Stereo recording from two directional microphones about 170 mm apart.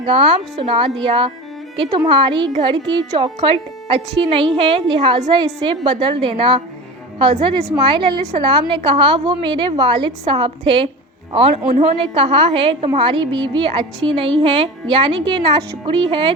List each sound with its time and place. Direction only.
0.0 s a woman's voice: 35° right (ahead or behind)
7.8 s a woman's voice: 30° right (ahead or behind)